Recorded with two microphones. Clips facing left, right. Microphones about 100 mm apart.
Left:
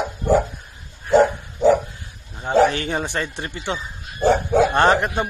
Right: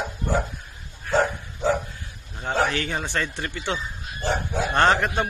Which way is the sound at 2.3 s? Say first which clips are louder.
Left 7 dB; 15° left (ahead or behind).